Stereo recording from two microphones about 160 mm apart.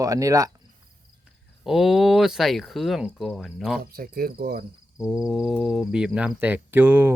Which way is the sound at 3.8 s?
70° right (ahead or behind).